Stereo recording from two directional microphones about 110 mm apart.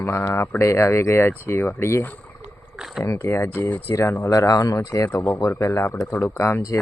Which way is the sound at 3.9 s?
25° left (ahead or behind).